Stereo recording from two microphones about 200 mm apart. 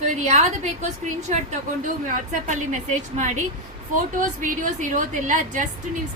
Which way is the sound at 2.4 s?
40° right (ahead or behind).